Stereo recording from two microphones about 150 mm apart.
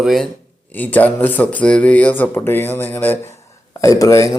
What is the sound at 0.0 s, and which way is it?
Speech, centre (ahead or behind).